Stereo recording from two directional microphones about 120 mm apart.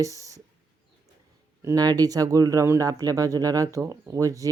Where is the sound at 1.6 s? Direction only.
30° right (ahead or behind).